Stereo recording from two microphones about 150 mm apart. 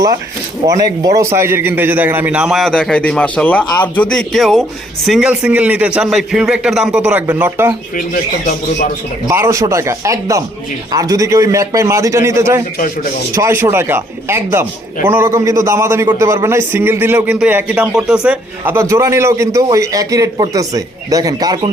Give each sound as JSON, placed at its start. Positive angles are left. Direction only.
{"t": 0.6, "sound": "a man's voice", "side_deg": -25}
{"t": 7.9, "sound": "speech", "side_deg": 60}
{"t": 9.2, "sound": "a man's voice", "side_deg": -20}